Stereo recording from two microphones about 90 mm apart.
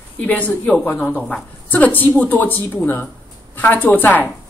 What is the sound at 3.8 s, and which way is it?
Speech, 20° left (ahead or behind).